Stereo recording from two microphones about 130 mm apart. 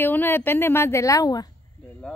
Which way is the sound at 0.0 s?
15° left (ahead or behind).